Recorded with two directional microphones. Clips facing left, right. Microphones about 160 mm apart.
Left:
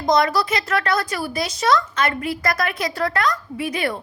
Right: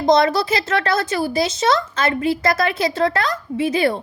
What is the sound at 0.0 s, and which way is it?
A woman's voice, 25° right (ahead or behind).